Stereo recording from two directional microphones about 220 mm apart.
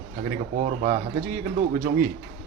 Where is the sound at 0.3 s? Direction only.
35° right (ahead or behind).